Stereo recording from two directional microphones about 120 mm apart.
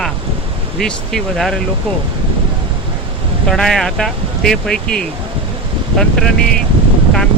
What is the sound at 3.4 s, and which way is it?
Speech, 5° left (ahead or behind).